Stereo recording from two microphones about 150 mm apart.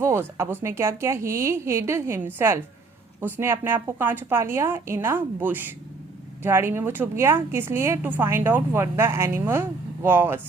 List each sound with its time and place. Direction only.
0.0 s a woman's voice: 20° right (ahead or behind)